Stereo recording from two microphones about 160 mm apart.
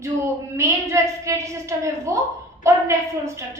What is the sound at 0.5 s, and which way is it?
A woman's voice, 15° right (ahead or behind).